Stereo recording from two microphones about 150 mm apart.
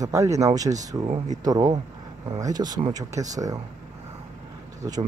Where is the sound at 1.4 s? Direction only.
25° right (ahead or behind).